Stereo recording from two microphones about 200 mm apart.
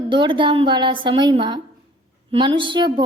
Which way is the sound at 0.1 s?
25° right (ahead or behind).